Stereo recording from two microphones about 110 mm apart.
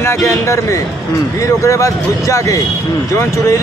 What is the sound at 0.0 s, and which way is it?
Speech, 25° left (ahead or behind).